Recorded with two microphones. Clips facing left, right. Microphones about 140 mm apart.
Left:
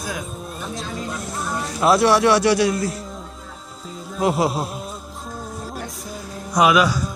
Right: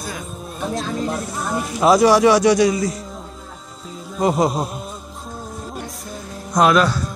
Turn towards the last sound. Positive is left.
turn(degrees=10)  # may be behind; listen again after turning